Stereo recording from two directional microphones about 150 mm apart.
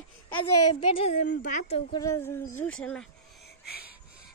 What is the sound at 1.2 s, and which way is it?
Speech, 60° left (ahead or behind).